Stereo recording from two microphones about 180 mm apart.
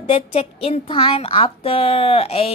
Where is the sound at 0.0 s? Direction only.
30° left (ahead or behind).